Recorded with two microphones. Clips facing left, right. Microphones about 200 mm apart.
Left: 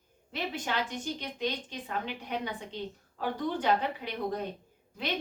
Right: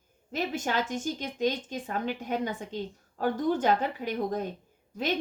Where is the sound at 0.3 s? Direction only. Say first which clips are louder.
Right 4 dB; 45° right (ahead or behind).